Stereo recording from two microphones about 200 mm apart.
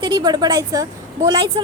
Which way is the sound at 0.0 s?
20° right (ahead or behind).